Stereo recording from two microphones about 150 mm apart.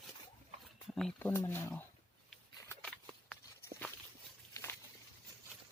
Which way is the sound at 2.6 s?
20° left (ahead or behind).